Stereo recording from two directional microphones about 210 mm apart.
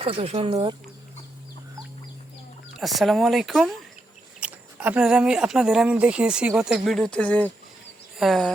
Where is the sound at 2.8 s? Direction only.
Centre (ahead or behind).